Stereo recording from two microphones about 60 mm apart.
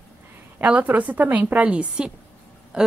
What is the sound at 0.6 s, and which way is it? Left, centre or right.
A woman's voice, right.